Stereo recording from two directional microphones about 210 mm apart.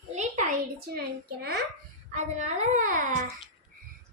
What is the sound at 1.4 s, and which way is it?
Speech, 50° right (ahead or behind).